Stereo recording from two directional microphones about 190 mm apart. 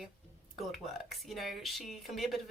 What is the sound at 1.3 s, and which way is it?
Speech, centre (ahead or behind).